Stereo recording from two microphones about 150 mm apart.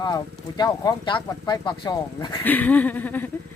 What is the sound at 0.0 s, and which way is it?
Speech, 25° left (ahead or behind).